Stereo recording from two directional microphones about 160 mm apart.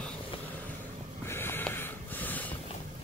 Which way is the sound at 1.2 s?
15° left (ahead or behind).